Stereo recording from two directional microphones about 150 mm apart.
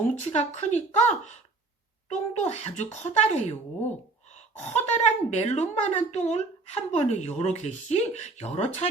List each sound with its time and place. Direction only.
0.0 s speech: 50° left (ahead or behind)
4.6 s speech: 45° left (ahead or behind)